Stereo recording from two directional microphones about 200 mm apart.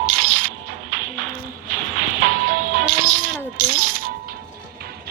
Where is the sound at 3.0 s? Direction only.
40° right (ahead or behind).